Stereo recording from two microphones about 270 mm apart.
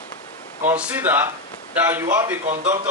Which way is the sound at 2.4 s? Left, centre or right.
Right.